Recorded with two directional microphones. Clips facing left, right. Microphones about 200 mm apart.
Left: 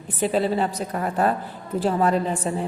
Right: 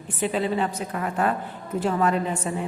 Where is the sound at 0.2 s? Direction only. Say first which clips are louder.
Left 3 dB; 35° left (ahead or behind).